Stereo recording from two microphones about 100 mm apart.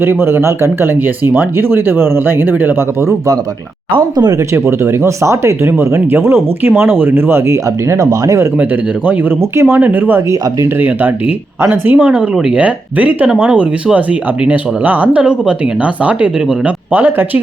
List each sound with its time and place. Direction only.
0.0 s speech: 25° right (ahead or behind)
3.9 s speech: 45° right (ahead or behind)
4.4 s speech: 30° right (ahead or behind)
8.5 s speech: 15° right (ahead or behind)
10.3 s speech: 35° right (ahead or behind)
10.8 s speech: 15° right (ahead or behind)